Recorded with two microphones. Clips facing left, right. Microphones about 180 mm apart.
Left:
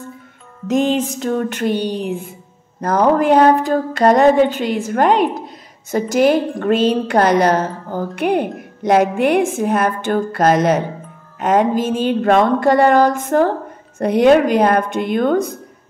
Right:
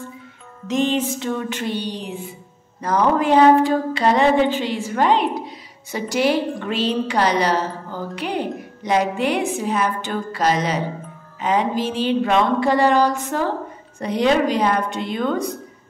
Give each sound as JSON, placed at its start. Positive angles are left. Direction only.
{"t": 0.7, "sound": "a woman's voice", "side_deg": 45}